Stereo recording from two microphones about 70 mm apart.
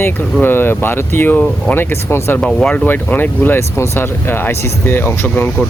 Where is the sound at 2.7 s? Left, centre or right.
Left.